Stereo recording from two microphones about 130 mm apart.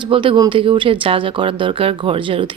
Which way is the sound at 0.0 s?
40° right (ahead or behind).